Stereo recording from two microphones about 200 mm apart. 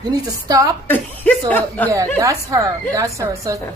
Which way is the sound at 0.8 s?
10° left (ahead or behind).